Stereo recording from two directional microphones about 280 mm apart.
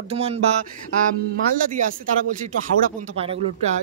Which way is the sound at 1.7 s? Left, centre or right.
Right.